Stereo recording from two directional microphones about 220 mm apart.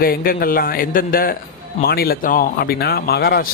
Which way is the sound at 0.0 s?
40° left (ahead or behind).